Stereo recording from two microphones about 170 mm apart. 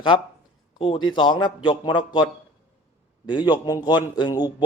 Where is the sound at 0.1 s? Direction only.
30° left (ahead or behind).